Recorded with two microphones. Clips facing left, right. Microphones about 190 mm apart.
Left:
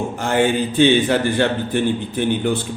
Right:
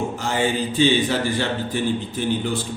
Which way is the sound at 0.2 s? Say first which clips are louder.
Left 7 dB; 60° left (ahead or behind).